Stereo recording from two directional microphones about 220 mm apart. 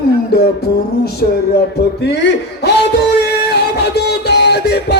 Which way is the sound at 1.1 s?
45° left (ahead or behind).